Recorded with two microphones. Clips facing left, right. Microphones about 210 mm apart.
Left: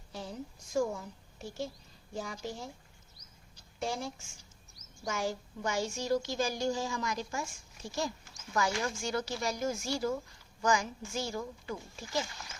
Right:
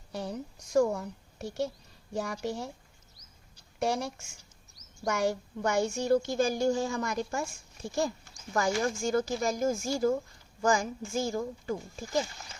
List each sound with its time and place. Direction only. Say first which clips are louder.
0.1 s a woman's voice: right 5 dB; 70° right (ahead or behind)
3.8 s a woman's voice: right 6 dB; 70° right (ahead or behind); by 12.2 s 45° right (ahead or behind)